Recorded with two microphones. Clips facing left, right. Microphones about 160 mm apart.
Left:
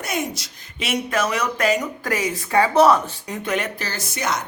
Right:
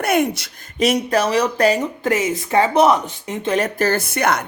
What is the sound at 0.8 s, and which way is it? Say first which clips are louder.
Speech: right 6 dB; 35° right (ahead or behind).